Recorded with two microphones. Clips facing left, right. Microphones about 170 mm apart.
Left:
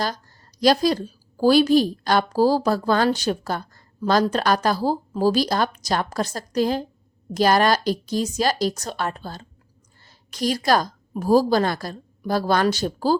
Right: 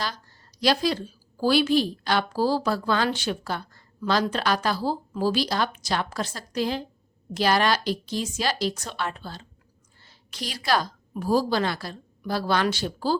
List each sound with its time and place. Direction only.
0.6 s a woman's voice: 45° left (ahead or behind)